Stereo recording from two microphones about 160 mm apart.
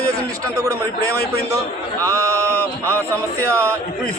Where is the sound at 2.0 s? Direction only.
20° right (ahead or behind).